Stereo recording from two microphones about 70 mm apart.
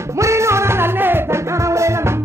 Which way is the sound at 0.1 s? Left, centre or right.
Right.